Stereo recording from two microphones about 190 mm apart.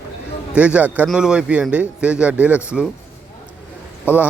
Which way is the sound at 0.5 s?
5° right (ahead or behind).